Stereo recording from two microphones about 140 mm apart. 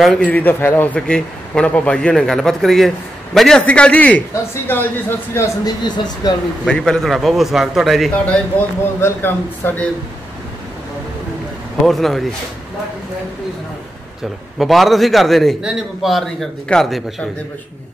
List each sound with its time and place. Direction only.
0.0 s a man's voice: 5° left (ahead or behind)
5.9 s speech: 30° left (ahead or behind)
6.6 s a man's voice: 5° left (ahead or behind)
8.5 s a man's voice: 15° left (ahead or behind)
11.8 s a man's voice: centre (ahead or behind)
14.6 s a man's voice: centre (ahead or behind)